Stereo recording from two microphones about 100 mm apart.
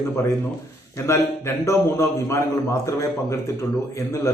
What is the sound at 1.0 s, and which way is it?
A man's voice, 30° left (ahead or behind).